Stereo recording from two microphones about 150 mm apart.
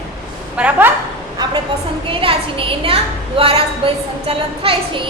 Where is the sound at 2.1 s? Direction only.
35° right (ahead or behind).